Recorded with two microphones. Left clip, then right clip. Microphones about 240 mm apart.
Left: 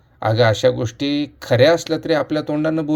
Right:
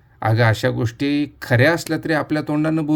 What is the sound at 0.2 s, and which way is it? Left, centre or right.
Speech, right.